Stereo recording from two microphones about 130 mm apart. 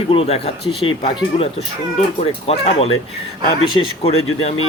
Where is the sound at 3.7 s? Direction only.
45° left (ahead or behind).